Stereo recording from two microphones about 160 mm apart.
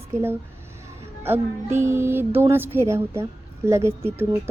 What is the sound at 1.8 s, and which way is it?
Speech, 15° right (ahead or behind).